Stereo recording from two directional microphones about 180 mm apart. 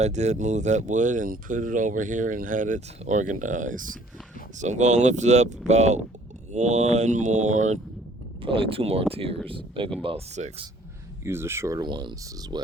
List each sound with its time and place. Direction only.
0.0 s speech: 40° right (ahead or behind)
8.4 s speech: 30° right (ahead or behind)
11.2 s speech: 15° right (ahead or behind)